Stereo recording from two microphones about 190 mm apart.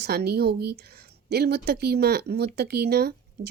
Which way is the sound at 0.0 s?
55° right (ahead or behind).